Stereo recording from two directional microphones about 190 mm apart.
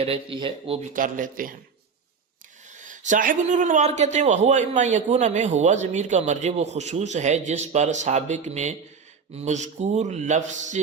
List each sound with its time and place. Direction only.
0.0 s speech: 30° right (ahead or behind)
0.9 s speech: 45° right (ahead or behind)
2.6 s speech: 40° right (ahead or behind)